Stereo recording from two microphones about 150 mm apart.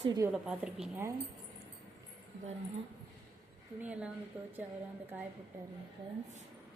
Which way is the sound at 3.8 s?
10° right (ahead or behind).